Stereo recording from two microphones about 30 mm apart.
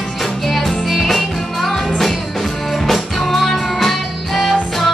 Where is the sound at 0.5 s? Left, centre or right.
Centre.